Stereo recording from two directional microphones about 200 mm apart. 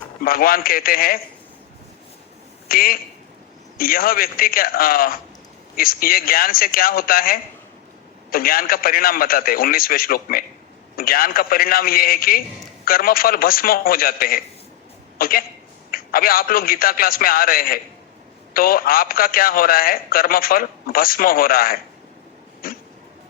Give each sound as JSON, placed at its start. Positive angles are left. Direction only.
{"t": 0.2, "sound": "a man's voice", "side_deg": 45}
{"t": 2.6, "sound": "a man's voice", "side_deg": 45}